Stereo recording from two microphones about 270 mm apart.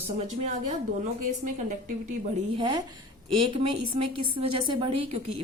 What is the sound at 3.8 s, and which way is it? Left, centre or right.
Speech, right.